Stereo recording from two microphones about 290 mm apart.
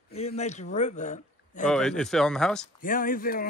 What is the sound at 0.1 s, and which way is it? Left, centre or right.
Speech, left.